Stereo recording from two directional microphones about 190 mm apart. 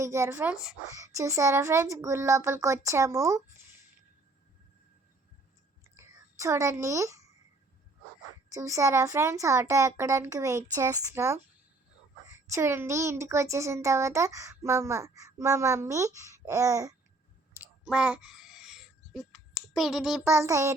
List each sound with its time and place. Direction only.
0.0 s speech: 15° right (ahead or behind)
0.9 s speech: 15° right (ahead or behind)
6.0 s a child's voice: 15° right (ahead or behind)
8.5 s speech: 15° right (ahead or behind)
17.6 s a sound: 5° right (ahead or behind)
20.3 s speech: 15° right (ahead or behind)